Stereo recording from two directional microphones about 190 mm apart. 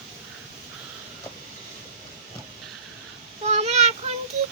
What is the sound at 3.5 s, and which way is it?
Child singing, 35° right (ahead or behind).